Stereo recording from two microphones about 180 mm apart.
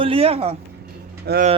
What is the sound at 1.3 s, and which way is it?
Speech, 65° right (ahead or behind).